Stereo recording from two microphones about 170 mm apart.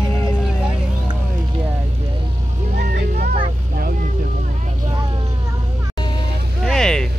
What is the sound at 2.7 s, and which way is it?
Vehicle, 65° right (ahead or behind).